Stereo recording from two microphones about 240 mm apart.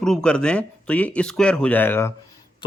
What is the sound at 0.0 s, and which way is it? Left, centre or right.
A man's voice, centre.